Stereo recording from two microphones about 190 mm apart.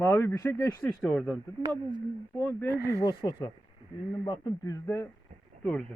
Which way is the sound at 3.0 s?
25° left (ahead or behind).